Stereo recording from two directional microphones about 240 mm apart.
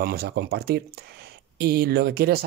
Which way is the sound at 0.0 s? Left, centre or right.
Right.